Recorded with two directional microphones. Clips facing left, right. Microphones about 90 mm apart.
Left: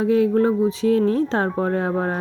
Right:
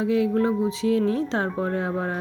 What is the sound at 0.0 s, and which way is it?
Speech, 40° left (ahead or behind).